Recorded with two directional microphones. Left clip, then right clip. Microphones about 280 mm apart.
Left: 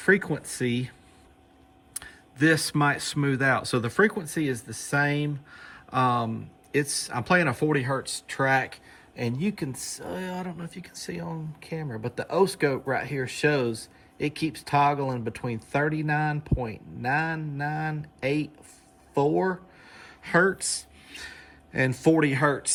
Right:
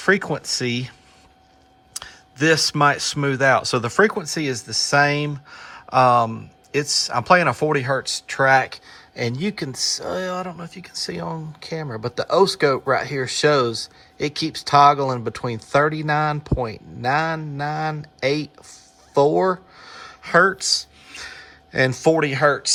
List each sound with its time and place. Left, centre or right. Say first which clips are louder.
0.0 s speech: right 4 dB; centre